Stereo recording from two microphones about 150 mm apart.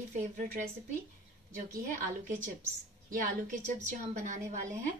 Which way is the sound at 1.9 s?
60° right (ahead or behind).